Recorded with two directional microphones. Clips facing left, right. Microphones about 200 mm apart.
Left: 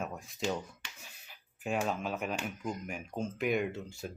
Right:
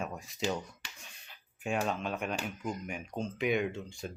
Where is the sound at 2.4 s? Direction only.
Centre (ahead or behind).